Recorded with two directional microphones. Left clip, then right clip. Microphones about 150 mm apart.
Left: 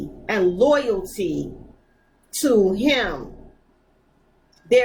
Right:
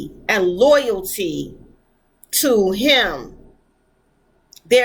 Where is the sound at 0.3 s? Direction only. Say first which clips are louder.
Right 4 dB; 15° right (ahead or behind).